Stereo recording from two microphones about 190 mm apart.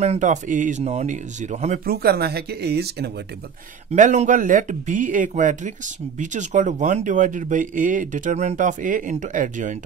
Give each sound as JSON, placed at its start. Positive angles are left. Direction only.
{"t": 0.0, "sound": "speech", "side_deg": -35}
{"t": 1.9, "sound": "speech", "side_deg": -55}
{"t": 3.9, "sound": "speech", "side_deg": -40}